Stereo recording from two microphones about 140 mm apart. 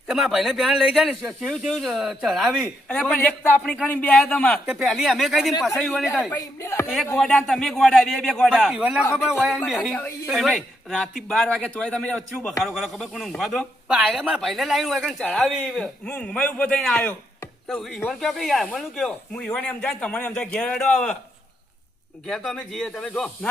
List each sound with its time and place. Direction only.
0.1 s a man's voice: centre (ahead or behind)
4.6 s speech: centre (ahead or behind)
6.3 s speech: 20° left (ahead or behind)
7.2 s a man's voice: 5° left (ahead or behind)
22.3 s speech: centre (ahead or behind)